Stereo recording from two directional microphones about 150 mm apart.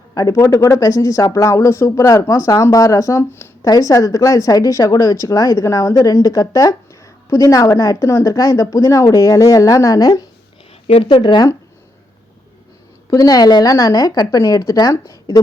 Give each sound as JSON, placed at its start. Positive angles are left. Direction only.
{"t": 0.1, "sound": "speech", "side_deg": 25}
{"t": 10.8, "sound": "speech", "side_deg": 35}
{"t": 13.1, "sound": "speech", "side_deg": 25}